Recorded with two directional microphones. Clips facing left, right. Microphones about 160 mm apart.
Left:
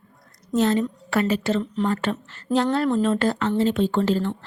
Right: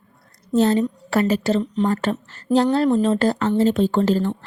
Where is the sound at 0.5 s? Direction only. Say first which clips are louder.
Right 3 dB; 35° right (ahead or behind).